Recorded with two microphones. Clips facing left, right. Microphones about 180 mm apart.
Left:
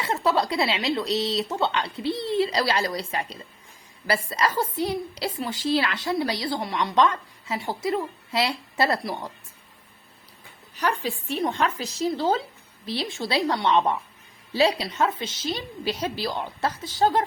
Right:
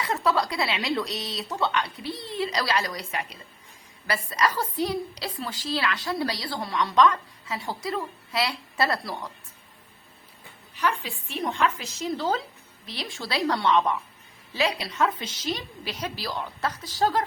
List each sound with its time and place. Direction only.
0.0 s a woman's voice: 25° left (ahead or behind)
10.8 s a woman's voice: 40° left (ahead or behind)